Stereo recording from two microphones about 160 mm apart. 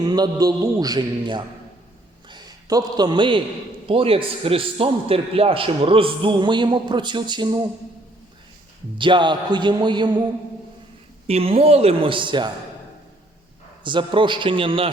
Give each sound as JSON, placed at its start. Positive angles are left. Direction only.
{"t": 0.0, "sound": "a man's voice", "side_deg": -25}
{"t": 9.0, "sound": "a man's voice", "side_deg": -30}
{"t": 11.3, "sound": "a man's voice", "side_deg": -40}
{"t": 13.8, "sound": "a man's voice", "side_deg": -30}